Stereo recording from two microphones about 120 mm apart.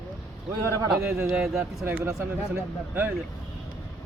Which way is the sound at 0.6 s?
25° right (ahead or behind).